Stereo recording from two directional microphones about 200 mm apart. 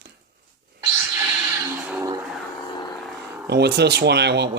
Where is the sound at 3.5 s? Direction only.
55° right (ahead or behind).